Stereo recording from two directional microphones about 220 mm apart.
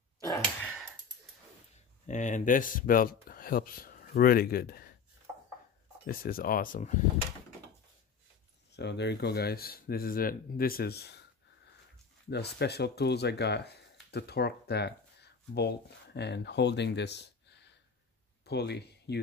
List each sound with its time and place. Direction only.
0.4 s a sound: 5° left (ahead or behind)
2.0 s speech: 35° left (ahead or behind)
6.0 s speech: 40° left (ahead or behind)
8.7 s speech: 50° left (ahead or behind)
12.3 s speech: 50° left (ahead or behind)